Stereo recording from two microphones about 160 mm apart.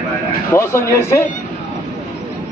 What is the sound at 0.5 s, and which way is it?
Speech, 15° left (ahead or behind).